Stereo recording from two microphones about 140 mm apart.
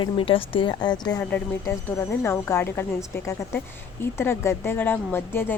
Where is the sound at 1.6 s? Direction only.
20° left (ahead or behind).